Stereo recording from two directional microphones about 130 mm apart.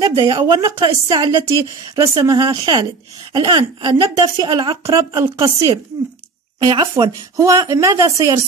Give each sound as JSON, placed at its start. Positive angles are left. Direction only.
{"t": 0.0, "sound": "speech", "side_deg": -30}
{"t": 0.8, "sound": "speech", "side_deg": -40}
{"t": 1.2, "sound": "speech", "side_deg": -25}
{"t": 4.8, "sound": "speech", "side_deg": -25}
{"t": 6.6, "sound": "speech", "side_deg": -35}
{"t": 7.0, "sound": "speech", "side_deg": -25}